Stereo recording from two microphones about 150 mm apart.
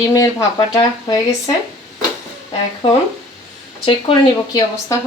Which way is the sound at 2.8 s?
40° left (ahead or behind).